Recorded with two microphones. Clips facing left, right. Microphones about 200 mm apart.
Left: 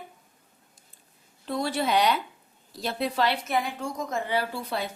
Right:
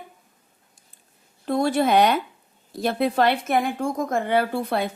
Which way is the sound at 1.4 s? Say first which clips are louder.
Right 7 dB; 50° right (ahead or behind).